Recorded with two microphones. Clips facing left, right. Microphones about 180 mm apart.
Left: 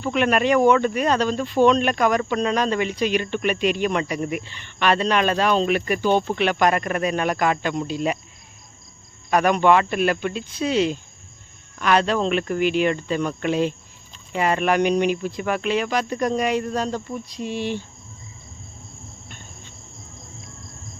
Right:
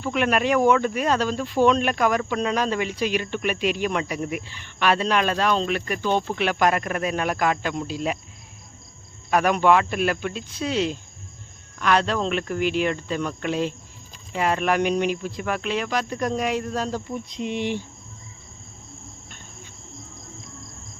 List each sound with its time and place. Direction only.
0.0 s speech: centre (ahead or behind)
9.3 s speech: 5° right (ahead or behind)
17.2 s speech: 20° right (ahead or behind)